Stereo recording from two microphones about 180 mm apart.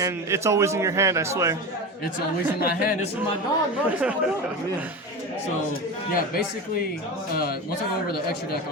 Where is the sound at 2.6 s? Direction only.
60° left (ahead or behind).